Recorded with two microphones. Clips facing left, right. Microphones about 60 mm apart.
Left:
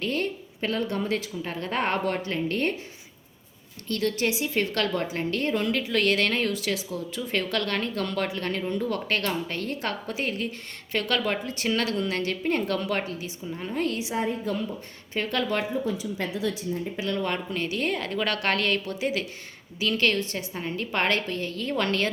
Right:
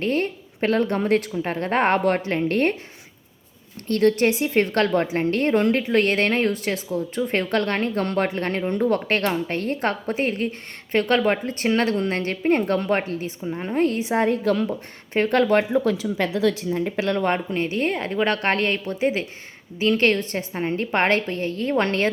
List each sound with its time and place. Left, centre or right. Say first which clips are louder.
0.0 s a woman's voice: right 5 dB; right
3.8 s a woman's voice: right 8 dB; right
14.3 s a woman's voice: right 8 dB; right
15.1 s a woman's voice: right 9 dB; right
15.8 s a woman's voice: right 7 dB; right